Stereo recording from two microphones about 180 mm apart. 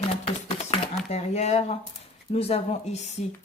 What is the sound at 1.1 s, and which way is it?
Speech, 40° left (ahead or behind).